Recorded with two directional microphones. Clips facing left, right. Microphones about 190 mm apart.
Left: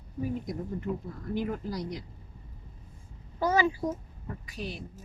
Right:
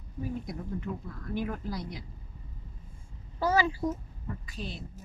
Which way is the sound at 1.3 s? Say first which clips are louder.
Left 2 dB; 15° left (ahead or behind).